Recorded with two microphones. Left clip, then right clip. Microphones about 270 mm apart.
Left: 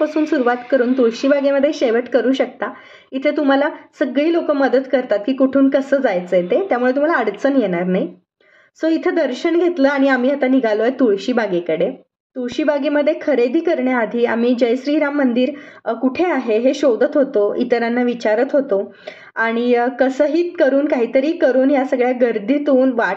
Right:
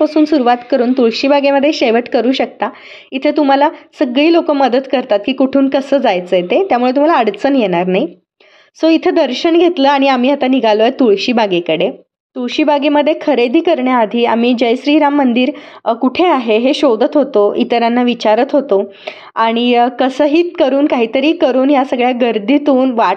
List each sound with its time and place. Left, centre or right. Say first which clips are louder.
0.0 s a woman's voice: right 6 dB; centre
9.0 s a woman's voice: right 5 dB; centre